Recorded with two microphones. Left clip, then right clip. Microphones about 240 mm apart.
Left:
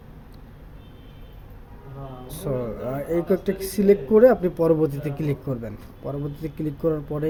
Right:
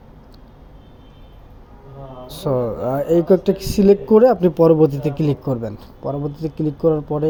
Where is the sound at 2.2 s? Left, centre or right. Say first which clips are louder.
Right 8 dB; centre.